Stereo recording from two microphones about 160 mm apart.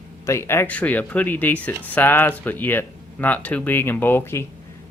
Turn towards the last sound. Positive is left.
turn(degrees=15)  # may be behind; listen again after turning